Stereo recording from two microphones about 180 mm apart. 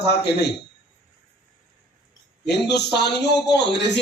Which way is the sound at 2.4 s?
65° left (ahead or behind).